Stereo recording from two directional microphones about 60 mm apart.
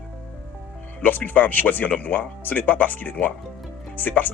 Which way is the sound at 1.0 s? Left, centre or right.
Left.